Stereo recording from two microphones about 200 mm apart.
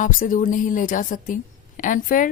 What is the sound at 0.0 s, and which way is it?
A woman's voice, 40° left (ahead or behind).